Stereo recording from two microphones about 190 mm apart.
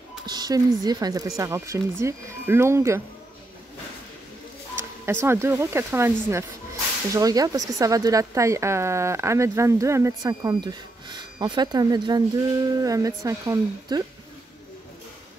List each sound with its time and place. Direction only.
0.3 s speech: 20° right (ahead or behind)
4.7 s speech: 15° right (ahead or behind)